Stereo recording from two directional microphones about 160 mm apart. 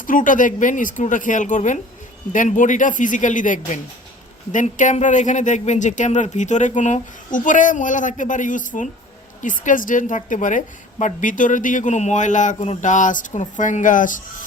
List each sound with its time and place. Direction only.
0.0 s speech: 55° left (ahead or behind)